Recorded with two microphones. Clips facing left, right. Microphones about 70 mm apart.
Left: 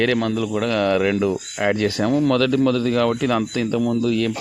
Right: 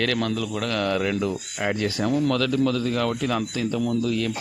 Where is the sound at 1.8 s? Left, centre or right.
Left.